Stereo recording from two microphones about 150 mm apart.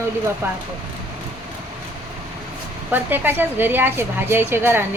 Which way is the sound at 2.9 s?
15° right (ahead or behind).